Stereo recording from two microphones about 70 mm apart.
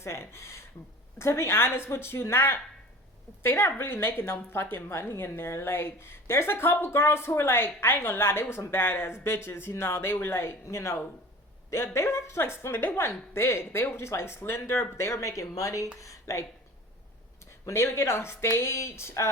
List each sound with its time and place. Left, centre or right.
0.0 s a woman's voice: left
17.7 s a woman's voice: left